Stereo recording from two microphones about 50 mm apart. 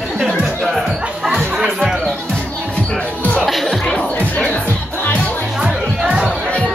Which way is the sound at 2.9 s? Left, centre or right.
Left.